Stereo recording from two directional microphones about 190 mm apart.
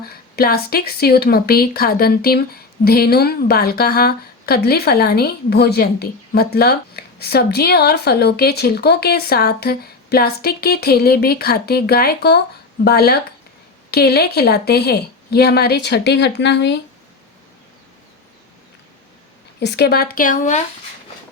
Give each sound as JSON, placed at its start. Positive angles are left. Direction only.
{"t": 0.0, "sound": "a woman's voice", "side_deg": 55}
{"t": 19.5, "sound": "speech", "side_deg": 60}